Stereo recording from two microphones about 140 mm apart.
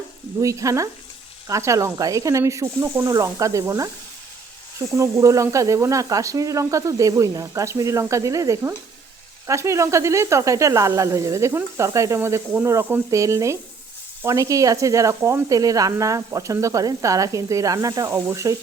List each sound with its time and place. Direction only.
0.3 s speech: 25° right (ahead or behind)